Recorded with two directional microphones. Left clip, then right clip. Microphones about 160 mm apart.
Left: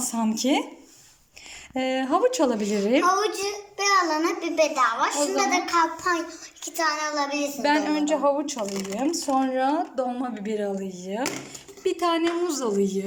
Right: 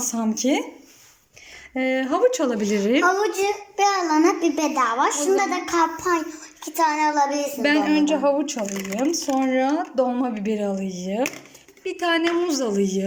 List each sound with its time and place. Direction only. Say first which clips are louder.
0.0 s a woman's voice: right 2 dB; 5° left (ahead or behind)
1.7 s a woman's voice: right 1 dB; 5° left (ahead or behind)
3.1 s a child's voice: right 3 dB; 25° right (ahead or behind); by 5.1 s 45° right (ahead or behind)
6.0 s a child's voice: right 3 dB; 15° right (ahead or behind)
6.8 s child singing: right 6 dB; 30° right (ahead or behind)
7.6 s a woman's voice: right 3 dB; centre (ahead or behind)
8.5 s speech: right 2 dB; 15° left (ahead or behind)
8.9 s a woman's voice: right 2 dB; centre (ahead or behind)